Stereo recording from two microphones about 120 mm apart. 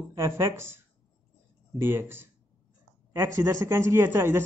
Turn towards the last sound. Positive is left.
turn(degrees=-20)  # may be behind; listen again after turning